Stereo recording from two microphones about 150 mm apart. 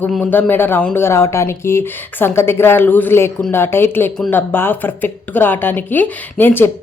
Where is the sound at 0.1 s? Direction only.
10° left (ahead or behind).